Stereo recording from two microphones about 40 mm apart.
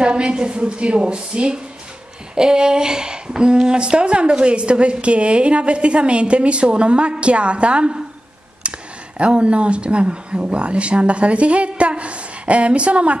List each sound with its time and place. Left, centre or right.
0.0 s a woman's voice: right
8.6 s a sound: right
9.2 s speech: right